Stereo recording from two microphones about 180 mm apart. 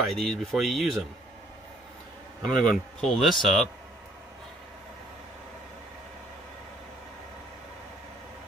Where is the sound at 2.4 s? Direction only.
Centre (ahead or behind).